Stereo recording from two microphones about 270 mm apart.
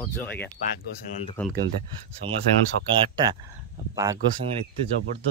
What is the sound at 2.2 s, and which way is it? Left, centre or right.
Speech, centre.